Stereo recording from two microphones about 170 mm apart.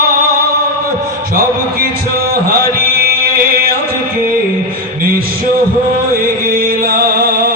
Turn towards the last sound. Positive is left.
turn(degrees=-60)  # may be behind; listen again after turning